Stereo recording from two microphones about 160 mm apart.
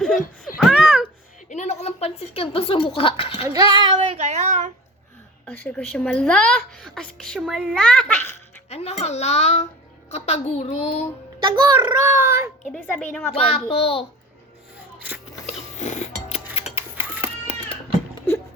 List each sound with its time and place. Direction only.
0.6 s babbling: 5° right (ahead or behind)
1.5 s speech: 45° left (ahead or behind)
3.5 s child singing: 25° right (ahead or behind); by 4.7 s 50° right (ahead or behind)
5.5 s a woman's voice: 10° left (ahead or behind)
8.7 s a child's voice: 40° left (ahead or behind)
11.4 s a child's voice: 25° right (ahead or behind)
12.6 s speech: 5° left (ahead or behind)
13.3 s a child's voice: 40° left (ahead or behind)
15.4 s music: 45° left (ahead or behind)
16.7 s a sound: 35° left (ahead or behind)